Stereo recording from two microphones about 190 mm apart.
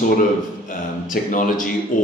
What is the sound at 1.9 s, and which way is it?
Speech, 45° left (ahead or behind).